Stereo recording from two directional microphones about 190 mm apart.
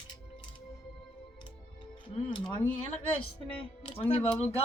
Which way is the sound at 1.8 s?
30° left (ahead or behind).